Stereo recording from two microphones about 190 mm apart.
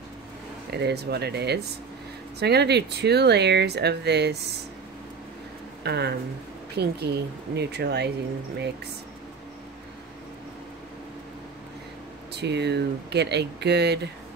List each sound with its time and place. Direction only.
0.7 s speech: 60° right (ahead or behind)
5.9 s speech: 60° right (ahead or behind)
12.4 s speech: 60° right (ahead or behind)